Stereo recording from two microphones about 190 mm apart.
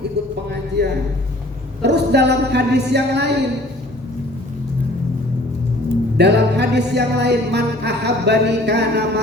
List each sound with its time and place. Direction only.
0.8 s music: 60° right (ahead or behind)
6.1 s music: 65° right (ahead or behind)